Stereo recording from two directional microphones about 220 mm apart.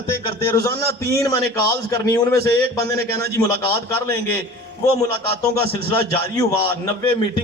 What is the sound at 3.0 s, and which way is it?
A man's voice, 45° right (ahead or behind).